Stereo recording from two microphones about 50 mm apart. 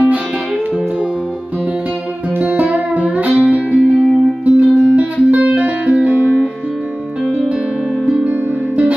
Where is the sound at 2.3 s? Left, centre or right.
Right.